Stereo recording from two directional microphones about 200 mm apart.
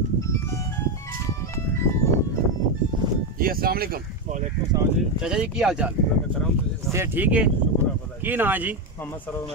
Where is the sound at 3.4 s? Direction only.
45° right (ahead or behind).